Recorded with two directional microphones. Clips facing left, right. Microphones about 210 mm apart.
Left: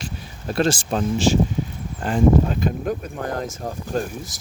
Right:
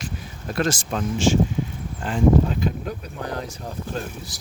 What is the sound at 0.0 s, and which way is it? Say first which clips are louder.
Speech: left 1 dB; 30° left (ahead or behind).